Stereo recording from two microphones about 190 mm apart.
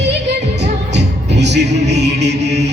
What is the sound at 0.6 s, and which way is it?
Music, 65° right (ahead or behind).